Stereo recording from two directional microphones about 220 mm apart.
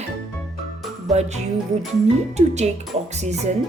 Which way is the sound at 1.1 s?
30° right (ahead or behind).